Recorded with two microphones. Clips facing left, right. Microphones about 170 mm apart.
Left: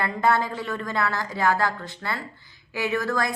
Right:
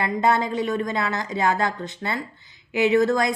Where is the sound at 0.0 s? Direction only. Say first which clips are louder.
Right 2 dB; 20° right (ahead or behind).